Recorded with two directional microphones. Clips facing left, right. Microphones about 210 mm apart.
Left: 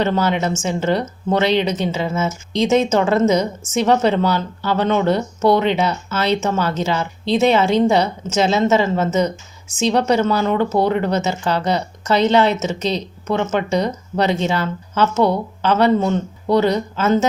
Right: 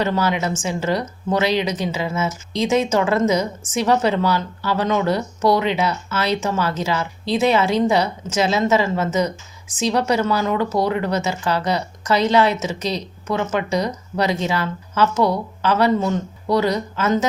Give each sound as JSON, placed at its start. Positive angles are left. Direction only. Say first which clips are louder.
{"t": 0.0, "sound": "speech", "louder": "left 2 dB", "side_deg": 25}